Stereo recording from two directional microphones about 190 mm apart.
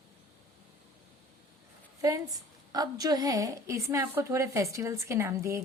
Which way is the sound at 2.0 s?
20° right (ahead or behind).